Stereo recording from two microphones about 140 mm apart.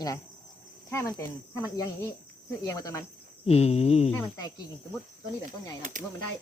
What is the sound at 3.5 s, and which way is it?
Speech, 50° left (ahead or behind).